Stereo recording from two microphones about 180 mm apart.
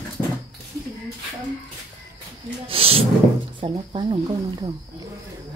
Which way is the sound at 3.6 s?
25° right (ahead or behind).